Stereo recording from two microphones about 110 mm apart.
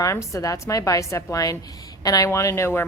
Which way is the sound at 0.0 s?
30° left (ahead or behind).